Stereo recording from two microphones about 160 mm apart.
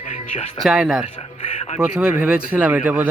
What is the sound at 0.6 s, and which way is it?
Speech, 5° right (ahead or behind).